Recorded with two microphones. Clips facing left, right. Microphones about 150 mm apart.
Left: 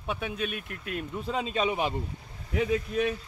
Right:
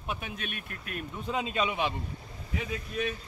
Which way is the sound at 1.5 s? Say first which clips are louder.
Left 3 dB; 40° left (ahead or behind).